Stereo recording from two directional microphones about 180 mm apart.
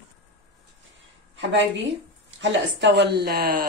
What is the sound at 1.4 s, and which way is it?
A woman's voice, 90° right.